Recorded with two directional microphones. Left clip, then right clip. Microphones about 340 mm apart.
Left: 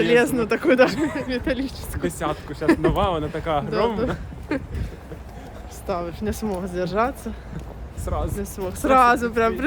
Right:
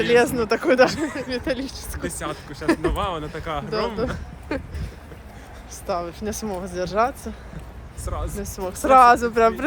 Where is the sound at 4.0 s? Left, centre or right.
Centre.